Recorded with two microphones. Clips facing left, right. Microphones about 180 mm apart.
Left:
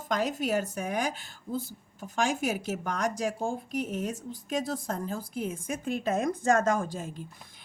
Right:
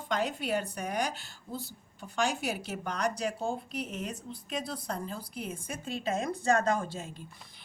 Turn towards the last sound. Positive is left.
turn(degrees=45)  # may be behind; listen again after turning